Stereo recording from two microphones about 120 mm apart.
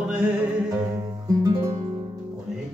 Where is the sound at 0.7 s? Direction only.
30° right (ahead or behind).